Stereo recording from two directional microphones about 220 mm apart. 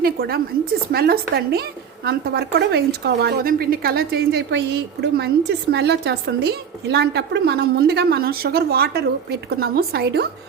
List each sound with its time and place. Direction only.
0.0 s a woman's voice: 45° right (ahead or behind)